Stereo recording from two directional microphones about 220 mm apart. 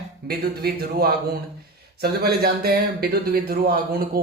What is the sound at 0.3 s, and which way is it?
Speech, 45° right (ahead or behind).